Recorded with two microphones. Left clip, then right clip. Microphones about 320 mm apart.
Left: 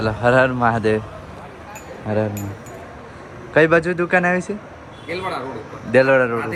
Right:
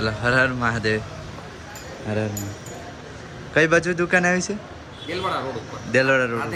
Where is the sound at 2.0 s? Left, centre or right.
Centre.